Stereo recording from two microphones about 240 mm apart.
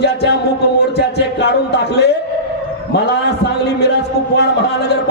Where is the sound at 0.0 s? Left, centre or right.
Left.